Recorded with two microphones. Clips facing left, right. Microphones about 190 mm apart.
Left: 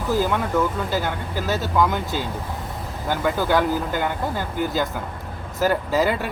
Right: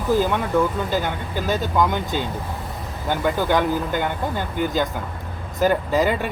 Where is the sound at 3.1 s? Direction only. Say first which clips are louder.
Right 1 dB; 5° left (ahead or behind).